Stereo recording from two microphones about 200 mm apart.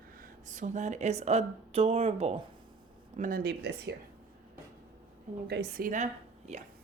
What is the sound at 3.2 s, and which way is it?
Speech, 45° right (ahead or behind).